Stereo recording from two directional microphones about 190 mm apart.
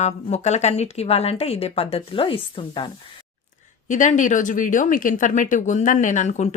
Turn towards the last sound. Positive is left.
turn(degrees=40)  # may be behind; listen again after turning